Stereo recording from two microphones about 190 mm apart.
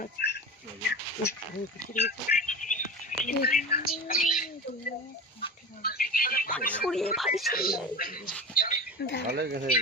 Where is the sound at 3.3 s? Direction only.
50° left (ahead or behind).